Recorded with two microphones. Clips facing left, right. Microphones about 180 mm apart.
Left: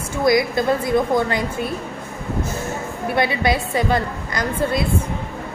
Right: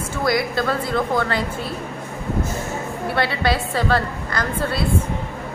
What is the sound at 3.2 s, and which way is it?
A woman's voice, 15° left (ahead or behind).